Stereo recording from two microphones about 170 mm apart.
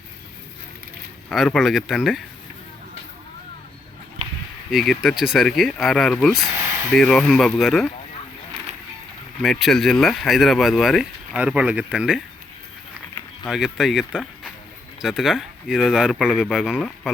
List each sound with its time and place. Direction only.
1.3 s speech: centre (ahead or behind)
4.2 s a sound: 40° right (ahead or behind)
4.7 s speech: centre (ahead or behind)
6.6 s a sound: 20° right (ahead or behind)
6.9 s speech: centre (ahead or behind)
9.4 s speech: centre (ahead or behind)
13.4 s speech: centre (ahead or behind)